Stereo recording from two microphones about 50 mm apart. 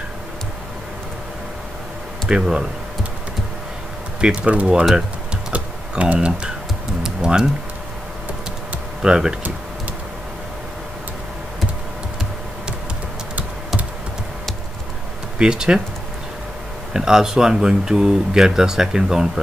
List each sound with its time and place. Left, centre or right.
2.2 s speech: centre
4.4 s speech: right
5.5 s typing: right
6.1 s speech: centre
7.0 s music: centre
9.0 s speech: centre
15.3 s speech: centre
16.9 s speech: centre